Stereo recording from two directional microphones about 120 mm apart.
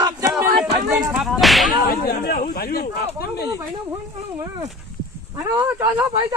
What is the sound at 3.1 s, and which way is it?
Speech, 25° right (ahead or behind).